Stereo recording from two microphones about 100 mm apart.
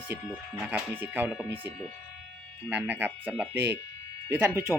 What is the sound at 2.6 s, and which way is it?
Speech, 20° right (ahead or behind).